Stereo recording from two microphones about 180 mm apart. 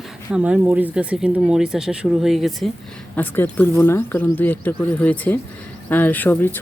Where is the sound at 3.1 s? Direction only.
10° left (ahead or behind).